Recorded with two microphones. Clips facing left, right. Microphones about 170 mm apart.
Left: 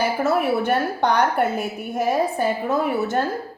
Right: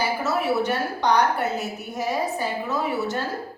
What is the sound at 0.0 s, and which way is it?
A woman's voice, 55° left (ahead or behind).